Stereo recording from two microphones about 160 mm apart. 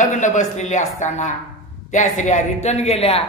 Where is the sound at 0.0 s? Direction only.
50° left (ahead or behind).